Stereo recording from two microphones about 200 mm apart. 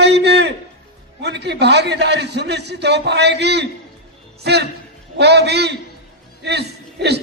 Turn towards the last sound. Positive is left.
turn(degrees=-55)  # may be behind; listen again after turning